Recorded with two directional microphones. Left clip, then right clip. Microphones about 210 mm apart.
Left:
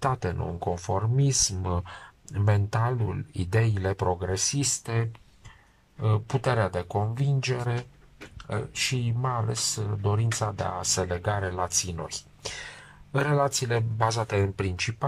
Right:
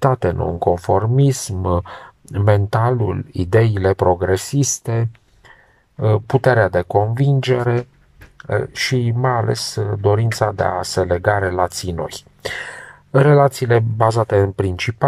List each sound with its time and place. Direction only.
0.0 s speech: 35° right (ahead or behind)
1.6 s speech: 25° right (ahead or behind)
2.3 s speech: 35° right (ahead or behind)
4.6 s speech: 25° right (ahead or behind)
5.9 s speech: 40° right (ahead or behind)